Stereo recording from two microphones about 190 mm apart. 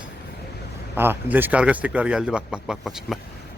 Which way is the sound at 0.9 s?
10° right (ahead or behind).